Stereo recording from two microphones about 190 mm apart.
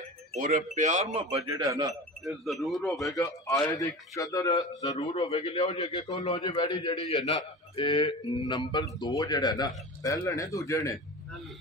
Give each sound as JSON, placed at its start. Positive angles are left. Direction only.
{"t": 0.3, "sound": "speech", "side_deg": -35}
{"t": 1.5, "sound": "speech", "side_deg": -15}
{"t": 2.2, "sound": "speech", "side_deg": 0}
{"t": 3.2, "sound": "a man's voice", "side_deg": 15}
{"t": 4.8, "sound": "a man's voice", "side_deg": 35}